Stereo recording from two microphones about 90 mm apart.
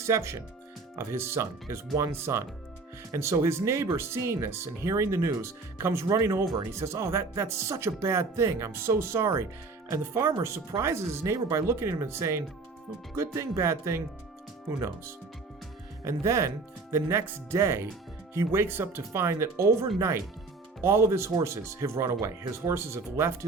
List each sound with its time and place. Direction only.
0.0 s speech: 35° right (ahead or behind)
16.0 s speech: 30° right (ahead or behind)